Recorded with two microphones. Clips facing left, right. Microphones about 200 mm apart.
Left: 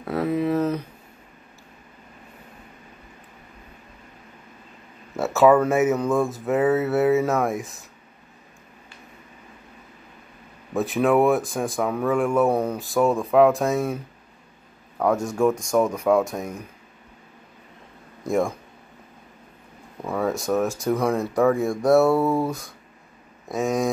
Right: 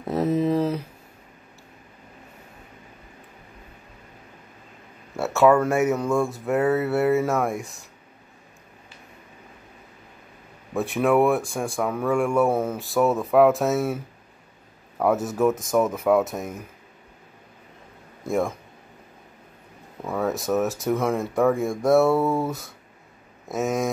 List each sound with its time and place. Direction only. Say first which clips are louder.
0.0 s a sound: right 1 dB; 20° right (ahead or behind)
0.4 s speech: even; 15° right (ahead or behind)
5.1 s speech: left 1 dB; centre (ahead or behind)
10.7 s speech: left 1 dB; centre (ahead or behind)
15.0 s speech: even; 5° right (ahead or behind)
18.2 s speech: left 2 dB; centre (ahead or behind)
20.0 s speech: left 1 dB; centre (ahead or behind)